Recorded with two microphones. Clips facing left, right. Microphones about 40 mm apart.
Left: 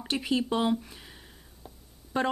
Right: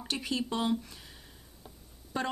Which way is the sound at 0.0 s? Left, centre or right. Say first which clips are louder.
Left 5 dB; centre.